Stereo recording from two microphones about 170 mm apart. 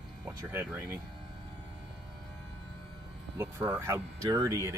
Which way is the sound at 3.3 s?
15° right (ahead or behind).